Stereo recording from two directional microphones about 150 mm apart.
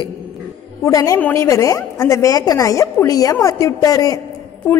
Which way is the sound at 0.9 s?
20° left (ahead or behind).